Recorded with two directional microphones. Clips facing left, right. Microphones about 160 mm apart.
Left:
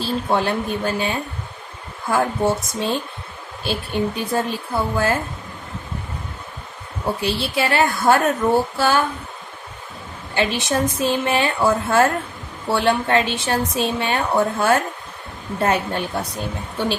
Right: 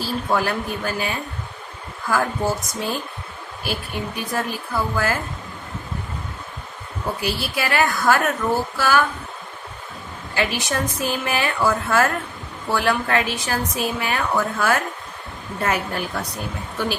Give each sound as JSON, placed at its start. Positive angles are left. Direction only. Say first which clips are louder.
{"t": 0.0, "sound": "a woman's voice", "louder": "left 2 dB", "side_deg": 25}
{"t": 7.2, "sound": "a woman's voice", "louder": "left 4 dB", "side_deg": 25}
{"t": 10.3, "sound": "a woman's voice", "louder": "left 3 dB", "side_deg": 25}